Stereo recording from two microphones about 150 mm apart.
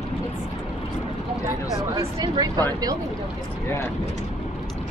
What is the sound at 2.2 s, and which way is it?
Speech, 25° right (ahead or behind).